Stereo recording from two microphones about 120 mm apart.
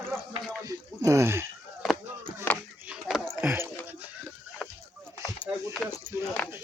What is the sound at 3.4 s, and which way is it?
Dog, 15° right (ahead or behind).